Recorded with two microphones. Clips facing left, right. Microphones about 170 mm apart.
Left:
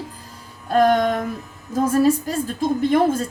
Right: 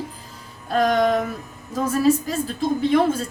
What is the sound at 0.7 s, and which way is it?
A woman's voice, 50° left (ahead or behind).